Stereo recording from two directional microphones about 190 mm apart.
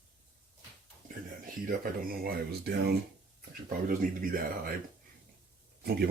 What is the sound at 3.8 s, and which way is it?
Speech, 50° right (ahead or behind).